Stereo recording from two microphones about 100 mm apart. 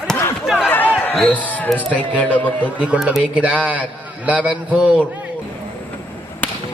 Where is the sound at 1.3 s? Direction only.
15° left (ahead or behind).